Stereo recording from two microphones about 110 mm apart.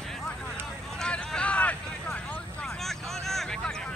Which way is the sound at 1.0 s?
5° left (ahead or behind).